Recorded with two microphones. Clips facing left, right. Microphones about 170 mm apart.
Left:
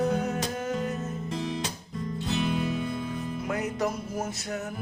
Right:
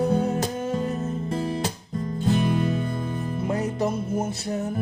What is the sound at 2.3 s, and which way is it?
Music, 45° right (ahead or behind).